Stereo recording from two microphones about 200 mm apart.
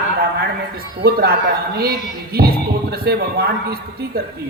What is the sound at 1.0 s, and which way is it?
A man's voice, 50° right (ahead or behind).